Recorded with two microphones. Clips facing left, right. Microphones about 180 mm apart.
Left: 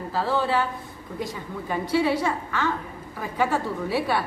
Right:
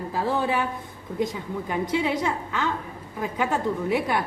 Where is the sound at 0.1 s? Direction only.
15° right (ahead or behind).